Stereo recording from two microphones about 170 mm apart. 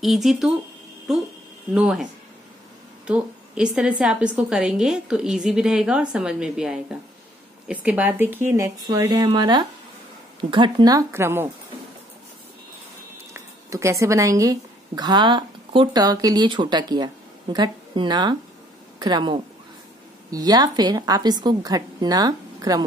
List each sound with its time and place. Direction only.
0.0 s a woman's voice: centre (ahead or behind)
3.1 s a woman's voice: 5° right (ahead or behind)
13.3 s a woman's voice: 15° right (ahead or behind)